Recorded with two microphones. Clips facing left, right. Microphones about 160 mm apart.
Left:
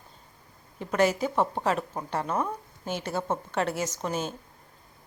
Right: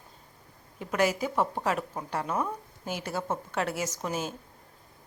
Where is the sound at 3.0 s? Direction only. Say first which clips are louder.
Left 2 dB; 25° left (ahead or behind).